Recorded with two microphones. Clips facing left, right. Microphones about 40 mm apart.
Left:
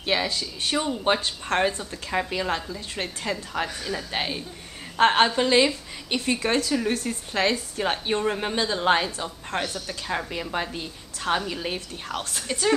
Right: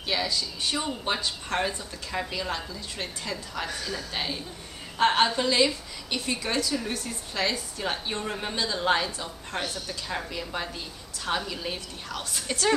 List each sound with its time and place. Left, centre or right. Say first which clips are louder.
0.0 s a woman's voice: left 3 dB; left
3.6 s speech: left 3 dB; centre
4.1 s a woman's voice: left 3 dB; left
9.5 s a woman's voice: left 4 dB; left
9.8 s a woman's voice: left 4 dB; left
12.1 s a woman's voice: left 3 dB; left
12.4 s a woman's voice: left 1 dB; centre